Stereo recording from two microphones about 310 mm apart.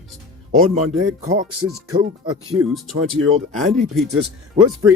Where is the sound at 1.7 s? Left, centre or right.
Centre.